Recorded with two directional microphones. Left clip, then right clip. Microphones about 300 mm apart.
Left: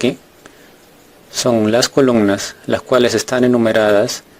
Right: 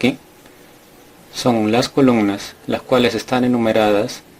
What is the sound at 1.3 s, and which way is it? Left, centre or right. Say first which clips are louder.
Speech: left 3 dB; left.